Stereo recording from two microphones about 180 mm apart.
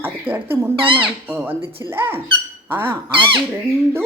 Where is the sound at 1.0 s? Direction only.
10° right (ahead or behind).